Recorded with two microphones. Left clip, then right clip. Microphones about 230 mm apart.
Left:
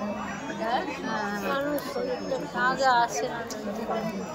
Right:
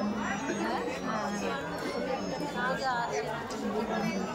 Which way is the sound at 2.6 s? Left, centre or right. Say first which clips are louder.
Left 9 dB; left.